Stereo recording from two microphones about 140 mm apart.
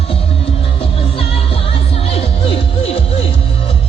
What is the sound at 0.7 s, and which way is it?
Music, 45° left (ahead or behind).